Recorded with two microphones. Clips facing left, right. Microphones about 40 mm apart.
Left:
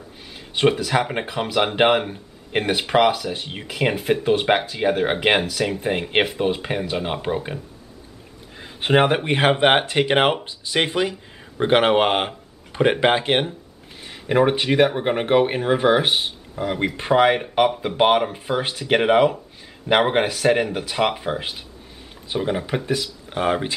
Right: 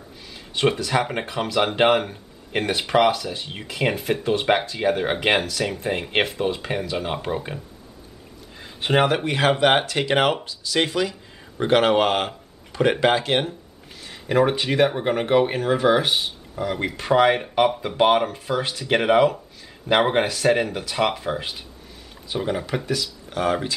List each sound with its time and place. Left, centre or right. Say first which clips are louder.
0.6 s speech: left 2 dB; centre
8.5 s a sound: left 3 dB; centre
9.0 s speech: left 2 dB; left; by 17.8 s centre
17.8 s speech: left 1 dB; centre